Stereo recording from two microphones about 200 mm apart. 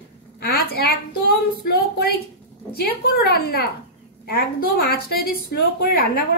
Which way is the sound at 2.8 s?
50° left (ahead or behind).